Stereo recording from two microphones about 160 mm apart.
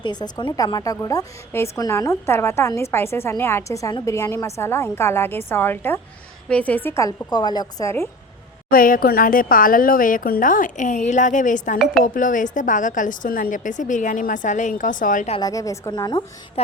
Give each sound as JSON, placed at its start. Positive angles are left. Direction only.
{"t": 0.0, "sound": "a woman's voice", "side_deg": 25}
{"t": 8.7, "sound": "a woman's voice", "side_deg": 65}
{"t": 15.4, "sound": "a woman's voice", "side_deg": 20}